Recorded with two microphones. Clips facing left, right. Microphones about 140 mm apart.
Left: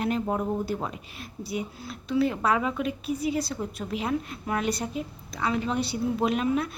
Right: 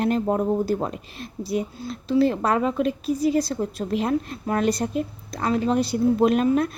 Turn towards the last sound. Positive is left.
turn(degrees=-45)  # may be behind; listen again after turning